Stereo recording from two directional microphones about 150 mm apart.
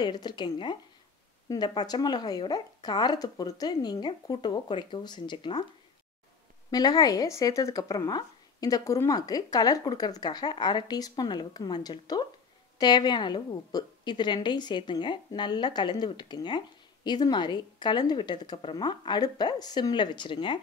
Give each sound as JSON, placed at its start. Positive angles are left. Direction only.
{"t": 0.0, "sound": "a woman's voice", "side_deg": 30}
{"t": 6.7, "sound": "a woman's voice", "side_deg": 25}